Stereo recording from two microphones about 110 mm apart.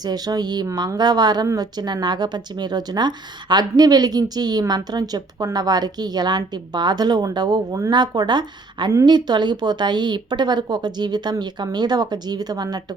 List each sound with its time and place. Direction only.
0.0 s speech: 35° right (ahead or behind)